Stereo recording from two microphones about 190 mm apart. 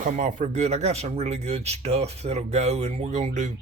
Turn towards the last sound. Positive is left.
turn(degrees=-40)  # may be behind; listen again after turning